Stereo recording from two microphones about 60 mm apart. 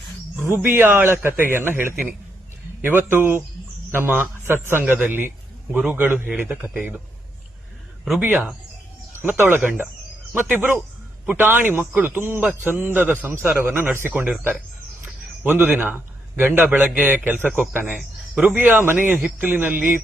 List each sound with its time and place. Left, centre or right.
0.4 s a man's voice: right
3.1 s a man's voice: right
4.8 s a man's voice: right
8.2 s a man's voice: right
15.0 s a sound: right
15.7 s a man's voice: right
16.8 s a man's voice: centre
17.1 s a man's voice: right